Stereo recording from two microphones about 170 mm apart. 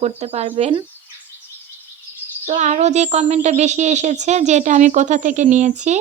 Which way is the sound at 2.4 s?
40° right (ahead or behind).